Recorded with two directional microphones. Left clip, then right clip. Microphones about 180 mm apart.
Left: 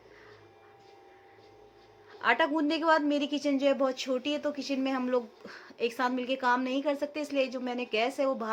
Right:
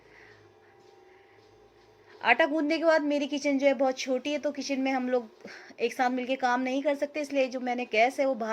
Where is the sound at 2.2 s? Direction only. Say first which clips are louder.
Right 2 dB; 15° right (ahead or behind).